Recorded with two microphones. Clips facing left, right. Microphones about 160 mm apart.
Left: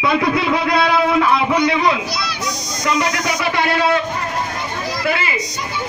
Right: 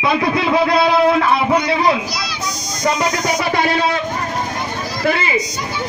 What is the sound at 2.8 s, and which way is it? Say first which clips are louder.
Speech: right 2 dB; 40° right (ahead or behind).